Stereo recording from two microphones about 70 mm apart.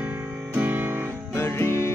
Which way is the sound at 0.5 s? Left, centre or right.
Right.